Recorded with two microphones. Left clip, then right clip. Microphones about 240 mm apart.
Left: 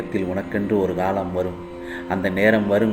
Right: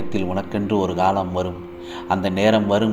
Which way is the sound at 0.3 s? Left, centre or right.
Centre.